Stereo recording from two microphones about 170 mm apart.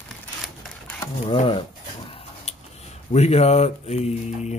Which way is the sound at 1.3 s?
35° left (ahead or behind).